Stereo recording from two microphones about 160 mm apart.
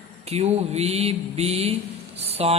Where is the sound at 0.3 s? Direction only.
40° right (ahead or behind).